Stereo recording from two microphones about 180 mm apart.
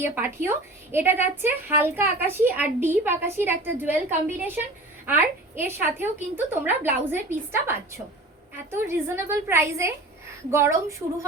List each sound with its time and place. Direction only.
0.0 s a woman's voice: 15° right (ahead or behind)